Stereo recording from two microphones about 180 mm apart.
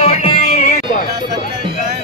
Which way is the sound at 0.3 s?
35° left (ahead or behind).